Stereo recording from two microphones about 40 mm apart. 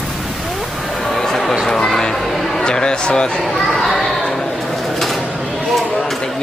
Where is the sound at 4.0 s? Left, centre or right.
Centre.